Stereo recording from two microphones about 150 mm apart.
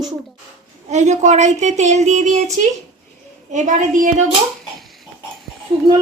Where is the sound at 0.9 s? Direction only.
50° right (ahead or behind).